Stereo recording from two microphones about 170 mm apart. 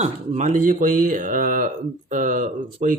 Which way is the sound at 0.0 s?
40° right (ahead or behind).